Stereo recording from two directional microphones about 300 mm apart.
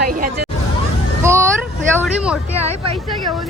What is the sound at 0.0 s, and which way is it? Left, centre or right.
Speech, right.